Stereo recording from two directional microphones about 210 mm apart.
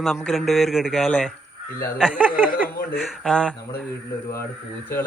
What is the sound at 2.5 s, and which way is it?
Speech, 45° left (ahead or behind).